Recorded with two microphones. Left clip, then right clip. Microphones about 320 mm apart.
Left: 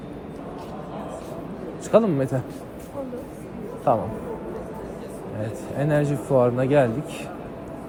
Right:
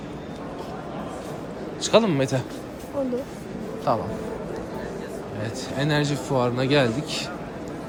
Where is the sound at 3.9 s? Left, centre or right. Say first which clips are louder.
Left 3 dB; centre.